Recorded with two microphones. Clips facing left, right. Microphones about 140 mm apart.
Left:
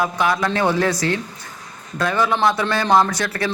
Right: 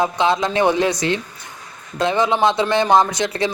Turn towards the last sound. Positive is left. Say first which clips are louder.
# right 1 dB
turn(degrees=-20)  # may be behind; listen again after turning